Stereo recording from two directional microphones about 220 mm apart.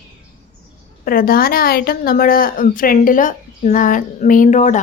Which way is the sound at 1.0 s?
40° left (ahead or behind).